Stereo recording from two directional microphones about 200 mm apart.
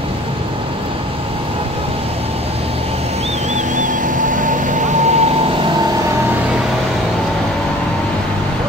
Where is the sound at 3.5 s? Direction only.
40° right (ahead or behind).